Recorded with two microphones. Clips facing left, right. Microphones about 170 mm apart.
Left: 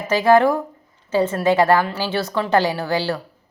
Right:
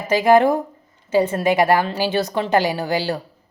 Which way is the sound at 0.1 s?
15° right (ahead or behind).